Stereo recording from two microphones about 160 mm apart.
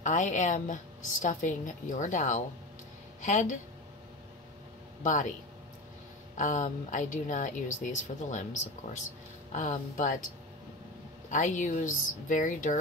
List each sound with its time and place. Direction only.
0.0 s a woman's voice: 50° left (ahead or behind)
5.0 s speech: 50° left (ahead or behind)
6.3 s speech: 50° left (ahead or behind)
9.5 s speech: 50° left (ahead or behind)
11.2 s speech: 50° left (ahead or behind)